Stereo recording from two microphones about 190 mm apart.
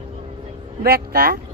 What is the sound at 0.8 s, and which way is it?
Speech, 55° right (ahead or behind).